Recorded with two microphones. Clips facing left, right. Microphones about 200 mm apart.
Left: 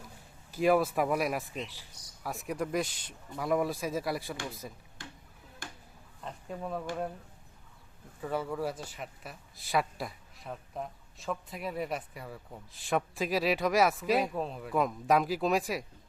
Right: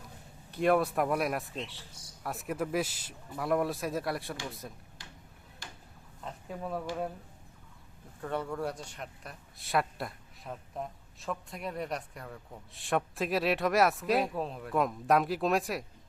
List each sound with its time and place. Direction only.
0.5 s speech: centre (ahead or behind)
5.0 s a sound: 50° left (ahead or behind)
6.2 s speech: centre (ahead or behind)
8.2 s speech: 5° left (ahead or behind)